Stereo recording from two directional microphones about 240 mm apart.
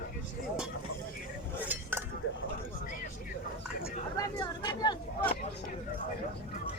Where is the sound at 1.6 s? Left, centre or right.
Centre.